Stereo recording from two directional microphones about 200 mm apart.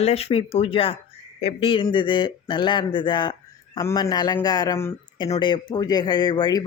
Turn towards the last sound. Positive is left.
turn(degrees=20)  # may be behind; listen again after turning